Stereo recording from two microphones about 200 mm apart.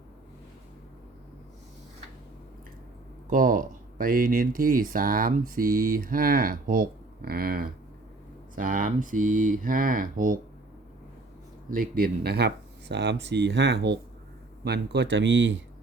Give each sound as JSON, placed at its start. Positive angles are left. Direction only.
{"t": 3.2, "sound": "speech", "side_deg": -45}
{"t": 11.7, "sound": "speech", "side_deg": -45}